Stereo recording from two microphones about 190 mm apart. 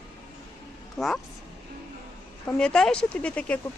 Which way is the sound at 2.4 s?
5° left (ahead or behind).